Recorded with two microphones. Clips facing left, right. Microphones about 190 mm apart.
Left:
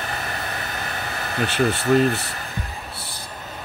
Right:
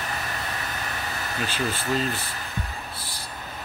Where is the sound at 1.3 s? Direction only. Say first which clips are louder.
Left 8 dB; 60° left (ahead or behind).